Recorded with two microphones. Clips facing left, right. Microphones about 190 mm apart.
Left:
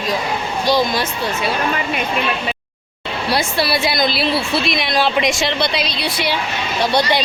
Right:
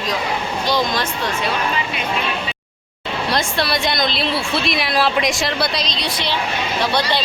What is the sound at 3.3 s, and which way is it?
A woman's voice, 5° left (ahead or behind).